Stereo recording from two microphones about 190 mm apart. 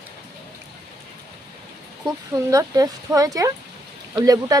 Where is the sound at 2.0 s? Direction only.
20° right (ahead or behind).